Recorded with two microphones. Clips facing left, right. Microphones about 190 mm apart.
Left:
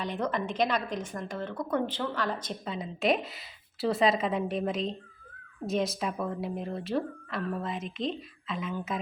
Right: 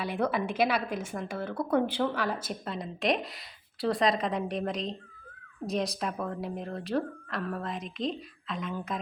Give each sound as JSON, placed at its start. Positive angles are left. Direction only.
{"t": 0.0, "sound": "speech", "side_deg": -10}